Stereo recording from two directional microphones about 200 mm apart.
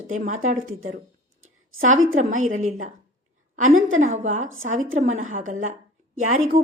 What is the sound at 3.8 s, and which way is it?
Speech, 80° right.